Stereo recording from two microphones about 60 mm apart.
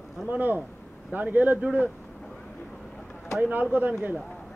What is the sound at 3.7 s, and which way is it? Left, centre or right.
Speech, right.